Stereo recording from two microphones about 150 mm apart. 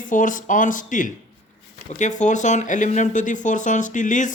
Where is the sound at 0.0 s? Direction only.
60° left (ahead or behind).